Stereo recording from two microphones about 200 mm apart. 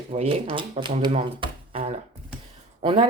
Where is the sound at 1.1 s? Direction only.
30° right (ahead or behind).